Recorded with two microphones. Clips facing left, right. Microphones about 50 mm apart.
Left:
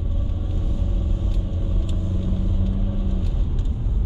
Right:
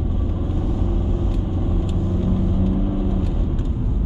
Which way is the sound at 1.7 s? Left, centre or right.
Right.